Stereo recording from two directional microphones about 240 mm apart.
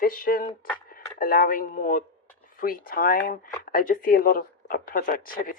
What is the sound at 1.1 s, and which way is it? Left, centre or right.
Speech, left.